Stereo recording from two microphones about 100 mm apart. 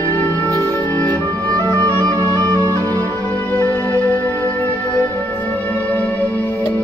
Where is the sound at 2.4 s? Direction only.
45° right (ahead or behind).